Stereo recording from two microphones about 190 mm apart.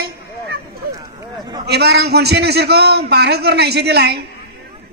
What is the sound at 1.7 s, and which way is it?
A man's voice, 60° right (ahead or behind).